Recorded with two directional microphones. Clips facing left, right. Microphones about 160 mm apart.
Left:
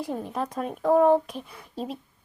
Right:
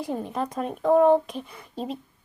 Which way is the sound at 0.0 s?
Centre (ahead or behind).